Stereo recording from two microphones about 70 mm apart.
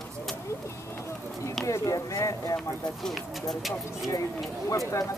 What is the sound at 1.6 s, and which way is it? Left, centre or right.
Speech, left.